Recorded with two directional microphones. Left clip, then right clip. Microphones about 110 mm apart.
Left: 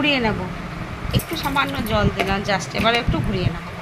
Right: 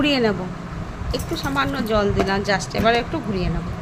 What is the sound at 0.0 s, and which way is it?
Speech, 60° right (ahead or behind).